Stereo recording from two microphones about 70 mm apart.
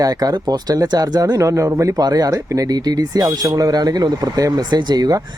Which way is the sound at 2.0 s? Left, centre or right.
Right.